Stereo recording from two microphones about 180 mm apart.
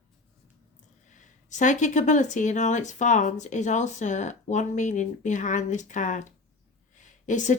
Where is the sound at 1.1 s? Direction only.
45° left (ahead or behind).